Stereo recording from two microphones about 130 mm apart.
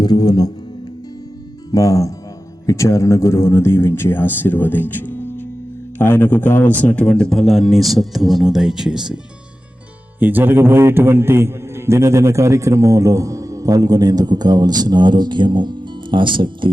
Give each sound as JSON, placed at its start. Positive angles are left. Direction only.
{"t": 0.0, "sound": "speech", "side_deg": 30}
{"t": 1.7, "sound": "a man's voice", "side_deg": 25}